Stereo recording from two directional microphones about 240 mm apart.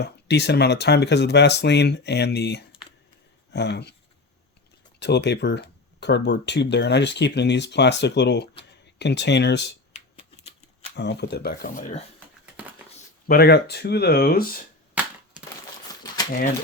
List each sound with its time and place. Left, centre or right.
0.0 s speech: left
4.9 s speech: left
10.2 s a sound: left
10.9 s speech: left
13.2 s speech: left
14.9 s crushing: centre
15.9 s typewriter: centre